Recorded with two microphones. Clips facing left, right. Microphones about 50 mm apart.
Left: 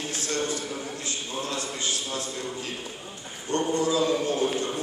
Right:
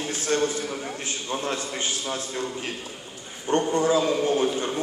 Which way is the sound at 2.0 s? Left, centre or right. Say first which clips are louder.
Right 3 dB; right.